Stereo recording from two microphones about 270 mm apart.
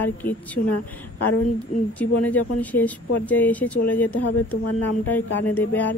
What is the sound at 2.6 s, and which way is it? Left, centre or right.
Speech, centre.